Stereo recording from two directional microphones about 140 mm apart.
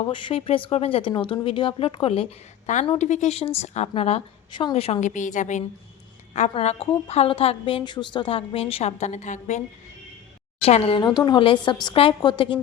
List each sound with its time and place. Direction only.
0.0 s speech: 35° left (ahead or behind)
2.7 s a woman's voice: 60° left (ahead or behind)
6.5 s a woman's voice: 45° left (ahead or behind)
10.6 s a woman's voice: 45° left (ahead or behind)